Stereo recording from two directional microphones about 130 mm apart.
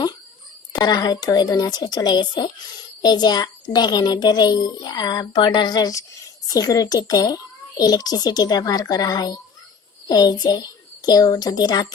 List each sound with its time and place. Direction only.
0.7 s a child's voice: 30° left (ahead or behind)